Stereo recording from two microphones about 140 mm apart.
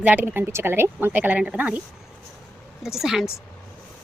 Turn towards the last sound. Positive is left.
turn(degrees=-5)  # may be behind; listen again after turning